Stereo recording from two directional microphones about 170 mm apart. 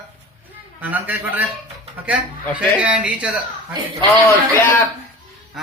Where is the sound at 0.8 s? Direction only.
10° right (ahead or behind).